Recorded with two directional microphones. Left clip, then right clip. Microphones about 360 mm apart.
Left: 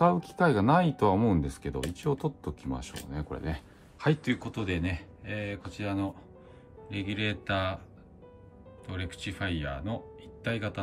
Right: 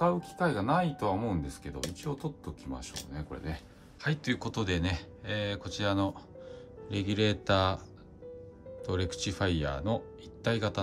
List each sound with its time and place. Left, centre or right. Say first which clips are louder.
0.0 s speech: left 4 dB; centre
3.1 s speech: left 4 dB; centre
4.0 s speech: left 4 dB; centre
8.8 s speech: right 5 dB; centre